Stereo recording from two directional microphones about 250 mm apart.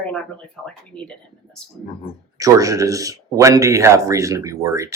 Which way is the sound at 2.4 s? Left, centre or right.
Centre.